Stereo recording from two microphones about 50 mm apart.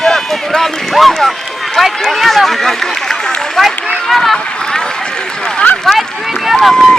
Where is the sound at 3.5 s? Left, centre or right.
Centre.